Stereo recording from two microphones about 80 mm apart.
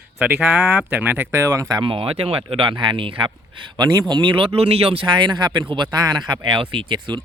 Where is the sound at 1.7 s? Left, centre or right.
Right.